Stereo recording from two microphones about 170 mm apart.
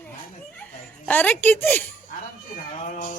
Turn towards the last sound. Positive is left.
turn(degrees=50)  # may be behind; listen again after turning